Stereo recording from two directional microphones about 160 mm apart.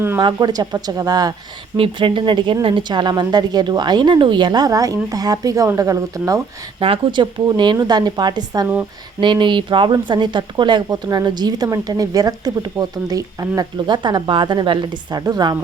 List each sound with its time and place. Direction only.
0.2 s speech: 25° right (ahead or behind)
6.8 s speech: 35° right (ahead or behind)